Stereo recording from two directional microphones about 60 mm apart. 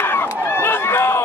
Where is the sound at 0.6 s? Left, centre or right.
Left.